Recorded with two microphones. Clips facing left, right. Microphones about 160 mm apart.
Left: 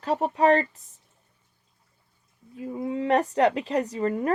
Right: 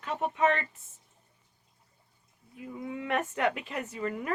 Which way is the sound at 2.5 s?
35° left (ahead or behind).